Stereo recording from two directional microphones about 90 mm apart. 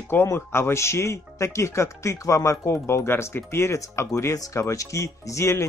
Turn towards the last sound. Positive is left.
turn(degrees=35)  # may be behind; listen again after turning